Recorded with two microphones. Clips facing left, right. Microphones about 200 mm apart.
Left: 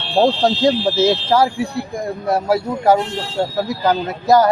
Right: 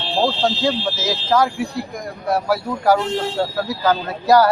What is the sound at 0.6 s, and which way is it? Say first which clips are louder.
Speech: left 6 dB; 35° left (ahead or behind).